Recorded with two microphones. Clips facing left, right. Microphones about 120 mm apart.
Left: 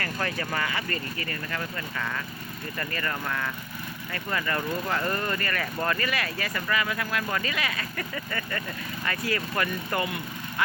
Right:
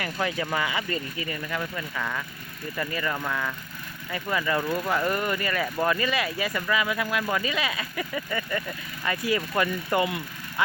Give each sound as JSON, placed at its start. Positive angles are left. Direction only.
{"t": 0.0, "sound": "speech", "side_deg": -15}